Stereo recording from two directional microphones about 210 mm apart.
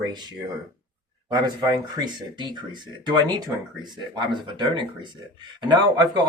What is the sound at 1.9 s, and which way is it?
Speech, 20° right (ahead or behind).